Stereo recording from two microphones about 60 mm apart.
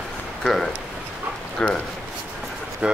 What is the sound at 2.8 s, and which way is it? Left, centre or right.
Speech, centre.